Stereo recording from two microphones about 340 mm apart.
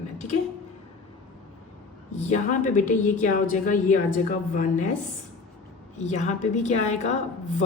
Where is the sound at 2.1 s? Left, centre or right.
Left.